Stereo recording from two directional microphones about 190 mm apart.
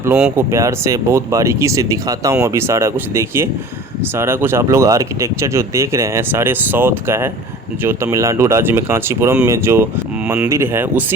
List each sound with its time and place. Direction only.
0.0 s speech: 5° right (ahead or behind)